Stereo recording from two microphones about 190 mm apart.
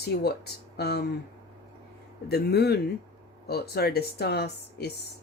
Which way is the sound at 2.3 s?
60° left (ahead or behind).